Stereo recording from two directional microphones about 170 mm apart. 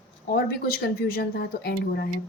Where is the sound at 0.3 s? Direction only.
60° left (ahead or behind).